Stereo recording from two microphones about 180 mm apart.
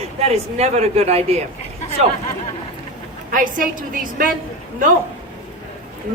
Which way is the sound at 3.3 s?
50° right (ahead or behind).